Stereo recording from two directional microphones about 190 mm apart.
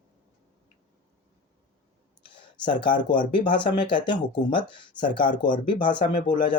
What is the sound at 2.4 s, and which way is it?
Speech, 25° left (ahead or behind).